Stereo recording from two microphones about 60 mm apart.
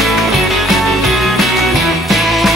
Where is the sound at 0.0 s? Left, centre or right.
Centre.